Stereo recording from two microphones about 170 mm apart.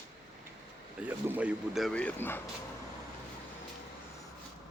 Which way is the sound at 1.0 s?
10° right (ahead or behind).